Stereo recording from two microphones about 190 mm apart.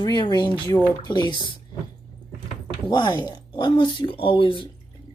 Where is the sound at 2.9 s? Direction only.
20° left (ahead or behind).